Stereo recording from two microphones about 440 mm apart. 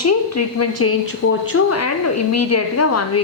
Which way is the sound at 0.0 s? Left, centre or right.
Left.